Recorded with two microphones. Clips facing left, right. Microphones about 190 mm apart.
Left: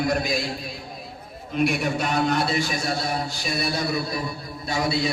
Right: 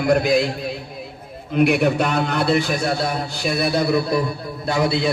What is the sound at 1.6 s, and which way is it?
A man's voice, 60° right (ahead or behind).